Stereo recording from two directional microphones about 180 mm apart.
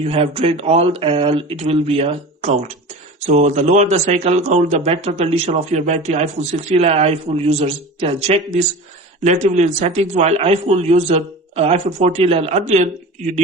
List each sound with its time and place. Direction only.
0.0 s a man's voice: 35° right (ahead or behind)